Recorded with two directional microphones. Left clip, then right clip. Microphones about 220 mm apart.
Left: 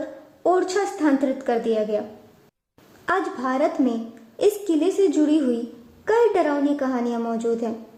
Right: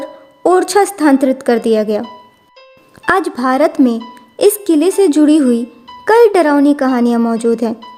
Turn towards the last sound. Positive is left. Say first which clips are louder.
# right 10 dB
turn(degrees=-45)  # may be behind; listen again after turning